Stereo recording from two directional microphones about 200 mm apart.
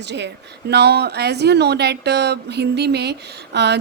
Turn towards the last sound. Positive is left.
turn(degrees=-55)  # may be behind; listen again after turning